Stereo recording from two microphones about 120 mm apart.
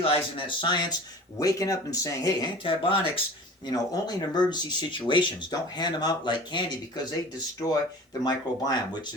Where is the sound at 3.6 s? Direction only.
35° left (ahead or behind).